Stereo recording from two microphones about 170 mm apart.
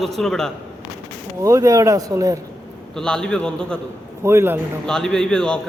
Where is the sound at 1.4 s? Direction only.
20° right (ahead or behind).